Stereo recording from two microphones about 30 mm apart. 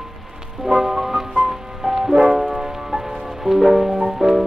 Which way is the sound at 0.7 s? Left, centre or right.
Centre.